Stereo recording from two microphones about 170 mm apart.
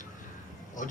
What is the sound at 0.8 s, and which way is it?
Speech, 50° left (ahead or behind).